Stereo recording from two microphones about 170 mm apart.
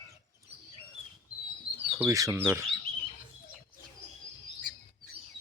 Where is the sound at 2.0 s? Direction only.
15° right (ahead or behind).